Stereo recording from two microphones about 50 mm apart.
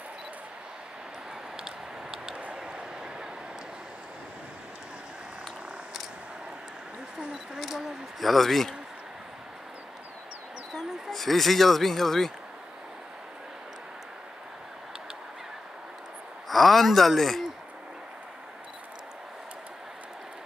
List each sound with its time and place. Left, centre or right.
1.6 s a sound: centre
7.2 s speech: centre
10.7 s speech: centre
16.4 s speech: centre